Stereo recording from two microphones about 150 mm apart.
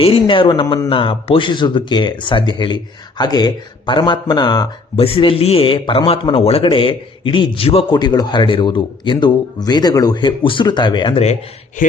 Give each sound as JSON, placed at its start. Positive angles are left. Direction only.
{"t": 0.0, "sound": "a man's voice", "side_deg": 35}
{"t": 5.0, "sound": "a man's voice", "side_deg": 40}
{"t": 11.8, "sound": "speech", "side_deg": 65}